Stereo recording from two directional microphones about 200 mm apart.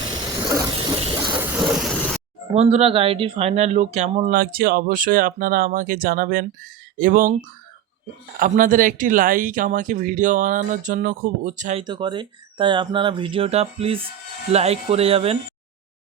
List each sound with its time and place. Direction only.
0.2 s a sound: 20° right (ahead or behind)
1.3 s vehicle: 10° right (ahead or behind)
2.6 s speech: 30° right (ahead or behind)
4.4 s speech: 50° right (ahead or behind)
8.4 s speech: 40° right (ahead or behind)
11.8 s speech: 20° right (ahead or behind)